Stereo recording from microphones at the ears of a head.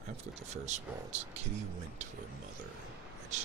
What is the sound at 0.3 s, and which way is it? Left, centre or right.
Speech, right.